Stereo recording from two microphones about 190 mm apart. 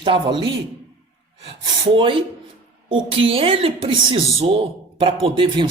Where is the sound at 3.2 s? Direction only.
30° right (ahead or behind).